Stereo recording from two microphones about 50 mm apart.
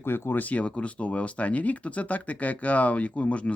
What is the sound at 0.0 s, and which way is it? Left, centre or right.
Speech, left.